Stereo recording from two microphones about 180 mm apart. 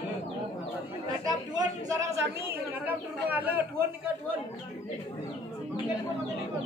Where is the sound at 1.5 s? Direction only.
20° right (ahead or behind).